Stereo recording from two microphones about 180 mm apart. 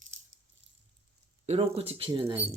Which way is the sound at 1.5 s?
35° right (ahead or behind).